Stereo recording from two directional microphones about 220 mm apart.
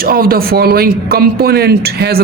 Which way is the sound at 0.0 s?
40° right (ahead or behind).